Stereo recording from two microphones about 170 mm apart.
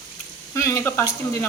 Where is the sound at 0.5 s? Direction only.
15° left (ahead or behind).